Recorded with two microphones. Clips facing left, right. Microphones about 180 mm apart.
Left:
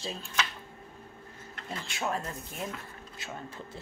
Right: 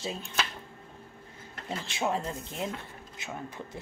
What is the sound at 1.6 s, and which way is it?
Speech, 25° right (ahead or behind).